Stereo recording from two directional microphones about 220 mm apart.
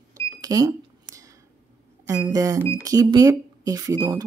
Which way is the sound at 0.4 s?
15° right (ahead or behind).